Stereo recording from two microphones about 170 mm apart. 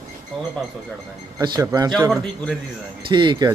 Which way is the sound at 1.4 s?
20° right (ahead or behind).